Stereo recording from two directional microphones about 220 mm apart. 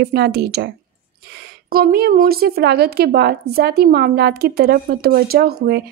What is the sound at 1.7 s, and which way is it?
A woman's voice, 45° right (ahead or behind).